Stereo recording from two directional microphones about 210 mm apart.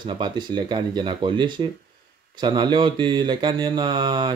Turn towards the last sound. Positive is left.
turn(degrees=-20)  # may be behind; listen again after turning